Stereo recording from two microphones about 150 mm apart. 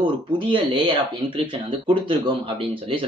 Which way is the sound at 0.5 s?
35° right (ahead or behind).